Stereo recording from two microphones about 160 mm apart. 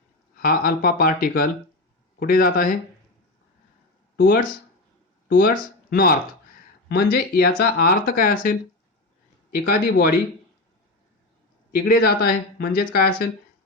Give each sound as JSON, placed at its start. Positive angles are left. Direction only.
{"t": 0.3, "sound": "speech", "side_deg": 65}
{"t": 4.2, "sound": "speech", "side_deg": 65}
{"t": 11.7, "sound": "speech", "side_deg": 70}